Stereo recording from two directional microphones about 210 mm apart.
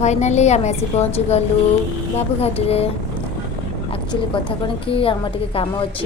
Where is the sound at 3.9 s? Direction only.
25° left (ahead or behind).